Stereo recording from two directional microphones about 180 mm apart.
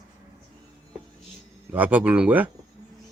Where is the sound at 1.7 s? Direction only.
10° right (ahead or behind).